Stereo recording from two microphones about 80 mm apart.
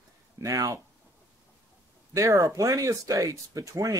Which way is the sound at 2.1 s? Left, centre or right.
Right.